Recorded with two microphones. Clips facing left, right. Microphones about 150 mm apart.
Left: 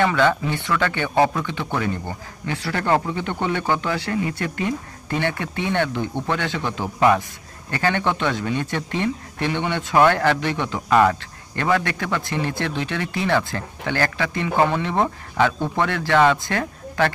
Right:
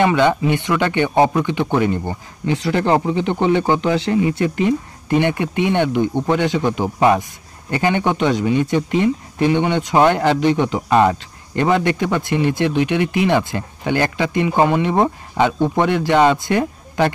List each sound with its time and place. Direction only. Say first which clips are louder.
0.0 s speech: right 4 dB; 20° right (ahead or behind)